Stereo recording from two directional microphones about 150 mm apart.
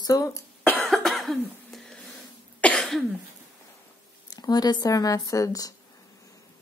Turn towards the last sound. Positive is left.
turn(degrees=25)  # may be behind; listen again after turning